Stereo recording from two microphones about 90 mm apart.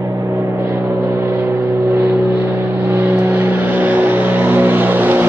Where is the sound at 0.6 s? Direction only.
25° right (ahead or behind).